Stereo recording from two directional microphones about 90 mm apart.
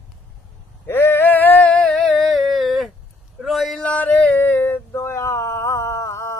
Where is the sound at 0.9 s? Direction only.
25° left (ahead or behind); by 3.8 s centre (ahead or behind).